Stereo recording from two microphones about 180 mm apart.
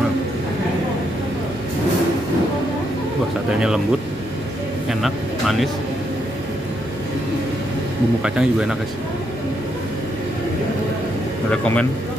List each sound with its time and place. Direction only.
3.5 s speech: 5° right (ahead or behind)
5.0 s speech: centre (ahead or behind)
8.2 s speech: 5° right (ahead or behind)